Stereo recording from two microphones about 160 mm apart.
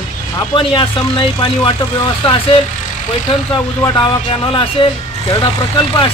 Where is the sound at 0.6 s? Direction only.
30° left (ahead or behind).